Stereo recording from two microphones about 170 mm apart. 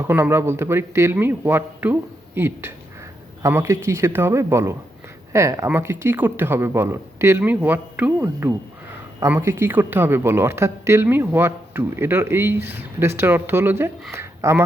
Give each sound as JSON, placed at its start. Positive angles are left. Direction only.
{"t": 0.0, "sound": "speech", "side_deg": -15}